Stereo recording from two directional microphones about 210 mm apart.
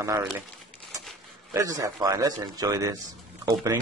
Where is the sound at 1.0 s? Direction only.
Centre (ahead or behind).